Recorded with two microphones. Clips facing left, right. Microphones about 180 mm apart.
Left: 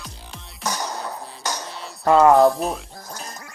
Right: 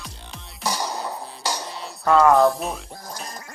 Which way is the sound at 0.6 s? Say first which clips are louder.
Right 1 dB; 10° right (ahead or behind).